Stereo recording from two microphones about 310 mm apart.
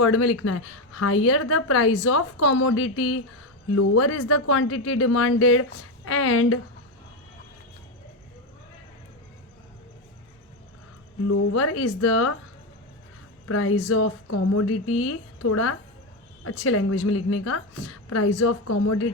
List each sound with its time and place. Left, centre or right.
0.0 s a woman's voice: left
11.3 s a woman's voice: left
13.5 s a woman's voice: left